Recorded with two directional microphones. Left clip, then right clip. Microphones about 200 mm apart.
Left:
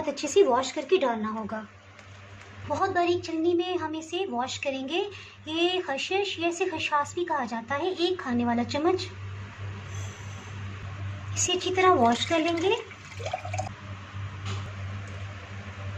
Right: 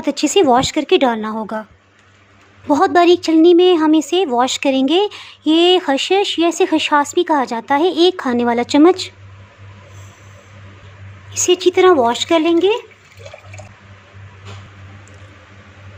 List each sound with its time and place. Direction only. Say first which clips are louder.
0.0 s a woman's voice: right 9 dB; 45° right (ahead or behind)
2.7 s speech: right 14 dB; 60° right (ahead or behind)
11.4 s a woman's voice: right 11 dB; 50° right (ahead or behind)